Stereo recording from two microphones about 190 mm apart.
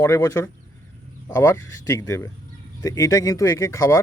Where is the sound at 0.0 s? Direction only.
15° left (ahead or behind).